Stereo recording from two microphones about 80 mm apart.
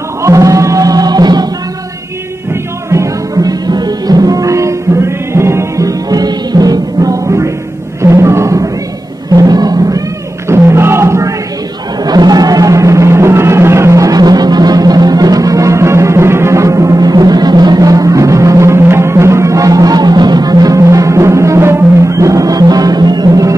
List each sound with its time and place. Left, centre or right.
0.2 s music: right
2.5 s music: right
8.0 s a sound: right
9.3 s music: right
10.5 s a sound: right
12.0 s music: right